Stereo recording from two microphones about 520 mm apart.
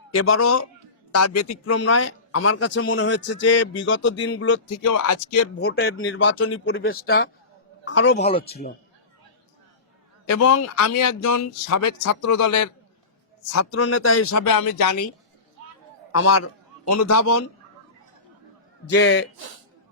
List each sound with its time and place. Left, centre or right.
0.2 s a man's voice: left
10.2 s a man's voice: left
16.1 s a man's voice: left
18.9 s a man's voice: left